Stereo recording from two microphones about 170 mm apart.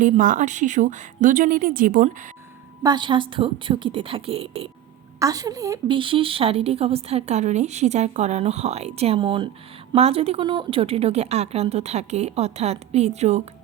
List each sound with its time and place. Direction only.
0.0 s a woman's voice: 50° right (ahead or behind)
2.8 s a woman's voice: 25° right (ahead or behind)
5.2 s a woman's voice: 20° right (ahead or behind)
6.0 s a woman's voice: 30° right (ahead or behind)